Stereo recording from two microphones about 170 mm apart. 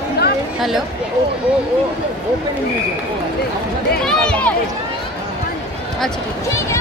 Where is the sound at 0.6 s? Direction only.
Centre (ahead or behind).